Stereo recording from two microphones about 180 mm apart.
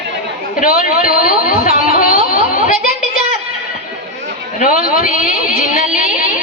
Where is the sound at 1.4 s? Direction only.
50° left (ahead or behind).